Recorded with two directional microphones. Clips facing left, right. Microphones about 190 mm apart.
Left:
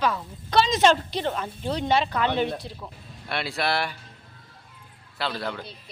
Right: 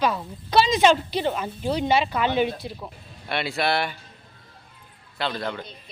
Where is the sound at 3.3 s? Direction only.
Centre (ahead or behind).